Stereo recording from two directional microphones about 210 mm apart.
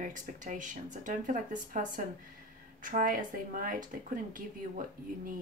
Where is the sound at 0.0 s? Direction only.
40° right (ahead or behind).